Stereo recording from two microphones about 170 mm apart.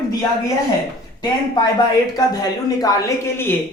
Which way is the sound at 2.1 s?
20° left (ahead or behind).